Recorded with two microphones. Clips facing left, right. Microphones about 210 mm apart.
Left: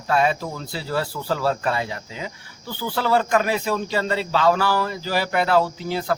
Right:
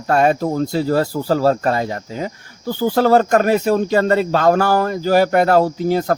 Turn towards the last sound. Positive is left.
turn(degrees=-45)  # may be behind; listen again after turning